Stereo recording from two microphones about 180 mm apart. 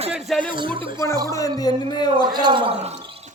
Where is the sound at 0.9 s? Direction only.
15° left (ahead or behind).